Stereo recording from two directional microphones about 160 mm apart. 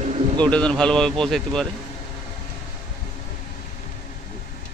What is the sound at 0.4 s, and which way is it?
Speech, 5° left (ahead or behind).